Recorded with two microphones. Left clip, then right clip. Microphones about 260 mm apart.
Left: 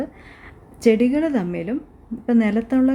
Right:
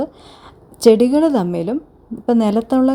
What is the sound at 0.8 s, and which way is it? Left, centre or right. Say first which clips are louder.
A woman's voice: right 6 dB; right.